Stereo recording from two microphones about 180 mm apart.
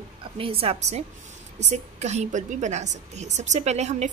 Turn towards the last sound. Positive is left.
turn(degrees=-40)  # may be behind; listen again after turning